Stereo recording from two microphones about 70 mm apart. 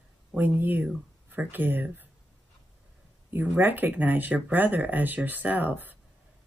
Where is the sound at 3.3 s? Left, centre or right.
Right.